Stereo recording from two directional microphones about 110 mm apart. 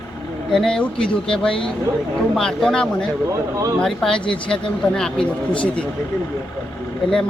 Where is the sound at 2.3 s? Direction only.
5° left (ahead or behind).